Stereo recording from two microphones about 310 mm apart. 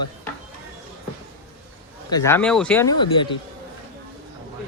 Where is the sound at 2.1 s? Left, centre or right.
Centre.